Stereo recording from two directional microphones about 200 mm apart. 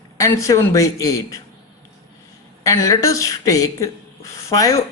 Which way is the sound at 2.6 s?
15° left (ahead or behind).